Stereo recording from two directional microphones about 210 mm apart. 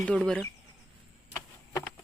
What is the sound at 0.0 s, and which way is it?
Speech, 5° left (ahead or behind).